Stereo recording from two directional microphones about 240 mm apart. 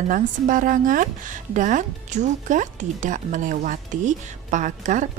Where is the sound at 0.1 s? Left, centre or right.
Right.